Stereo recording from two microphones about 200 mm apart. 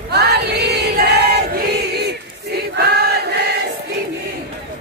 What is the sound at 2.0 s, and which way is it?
Choir, 55° right (ahead or behind).